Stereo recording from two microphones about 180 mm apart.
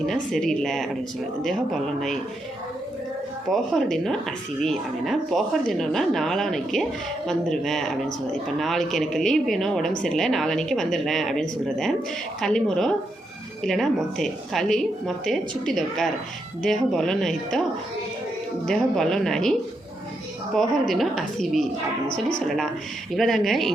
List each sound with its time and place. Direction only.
0.0 s speech: centre (ahead or behind)
3.5 s speech: centre (ahead or behind)
20.6 s speech: centre (ahead or behind)
23.1 s speech: centre (ahead or behind)